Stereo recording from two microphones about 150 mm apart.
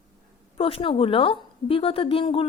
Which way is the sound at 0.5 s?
35° left (ahead or behind).